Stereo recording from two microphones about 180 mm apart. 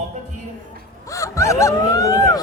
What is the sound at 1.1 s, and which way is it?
Honk, 15° left (ahead or behind).